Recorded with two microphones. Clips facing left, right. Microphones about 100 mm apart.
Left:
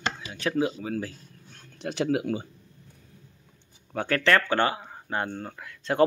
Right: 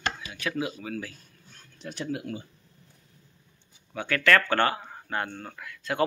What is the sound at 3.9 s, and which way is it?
Speech, 45° left (ahead or behind).